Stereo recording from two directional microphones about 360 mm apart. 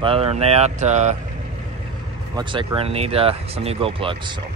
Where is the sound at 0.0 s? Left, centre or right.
Centre.